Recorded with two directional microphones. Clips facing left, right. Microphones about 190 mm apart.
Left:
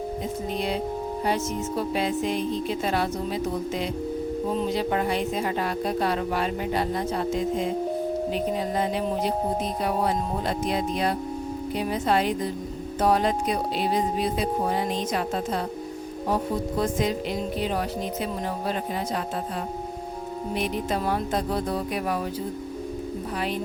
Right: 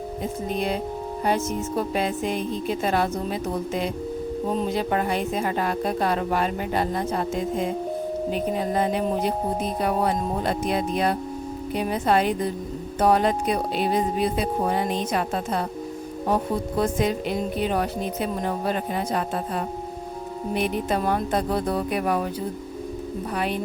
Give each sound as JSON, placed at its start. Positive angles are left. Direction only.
{"t": 2.0, "sound": "speech", "side_deg": -50}
{"t": 4.5, "sound": "speech", "side_deg": -50}
{"t": 8.3, "sound": "speech", "side_deg": -50}
{"t": 10.4, "sound": "speech", "side_deg": -55}
{"t": 16.8, "sound": "speech", "side_deg": -55}
{"t": 20.6, "sound": "speech", "side_deg": -55}